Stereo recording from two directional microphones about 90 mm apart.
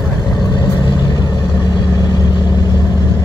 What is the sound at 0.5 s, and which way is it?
Vehicle, 50° left (ahead or behind).